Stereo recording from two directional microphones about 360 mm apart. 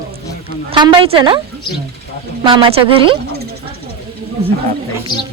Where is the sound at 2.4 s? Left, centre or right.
Centre.